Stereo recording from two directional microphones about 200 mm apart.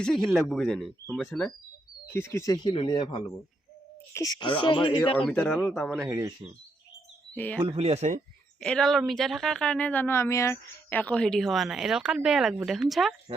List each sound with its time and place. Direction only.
0.0 s a woman's voice: centre (ahead or behind)
2.0 s speech: 10° left (ahead or behind)
5.1 s a woman's voice: 5° left (ahead or behind)
6.0 s speech: 15° right (ahead or behind)
7.3 s speech: 10° left (ahead or behind)
7.6 s speech: 30° right (ahead or behind)
8.6 s a woman's voice: 5° left (ahead or behind)